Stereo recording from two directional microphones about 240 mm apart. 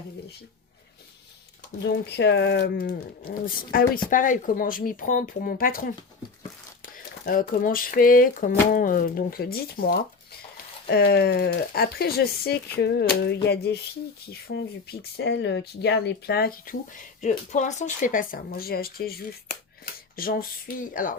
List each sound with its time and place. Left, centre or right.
1.8 s speech: left
12.7 s a sound: left
14.4 s speech: left